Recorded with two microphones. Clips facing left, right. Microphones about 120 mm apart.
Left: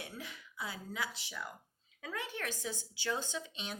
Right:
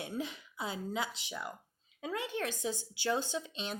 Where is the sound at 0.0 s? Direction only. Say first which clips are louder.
Right 8 dB; 25° right (ahead or behind).